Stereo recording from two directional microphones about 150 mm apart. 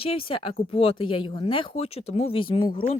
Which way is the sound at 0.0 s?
40° left (ahead or behind).